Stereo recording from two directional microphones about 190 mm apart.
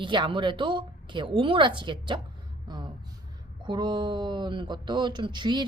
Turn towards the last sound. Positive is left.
turn(degrees=-25)  # may be behind; listen again after turning